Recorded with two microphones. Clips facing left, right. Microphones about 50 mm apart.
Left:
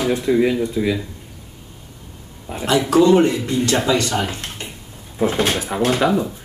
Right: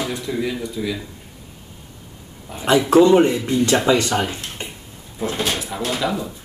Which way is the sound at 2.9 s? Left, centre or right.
Right.